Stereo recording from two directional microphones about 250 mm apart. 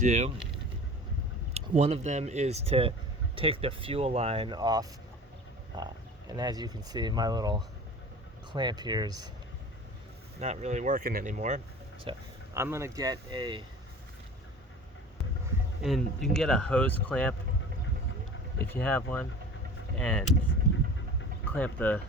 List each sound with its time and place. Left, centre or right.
0.0 s speech: right
1.5 s speech: right
10.4 s speech: right
15.8 s speech: centre
18.7 s speech: centre
21.4 s speech: centre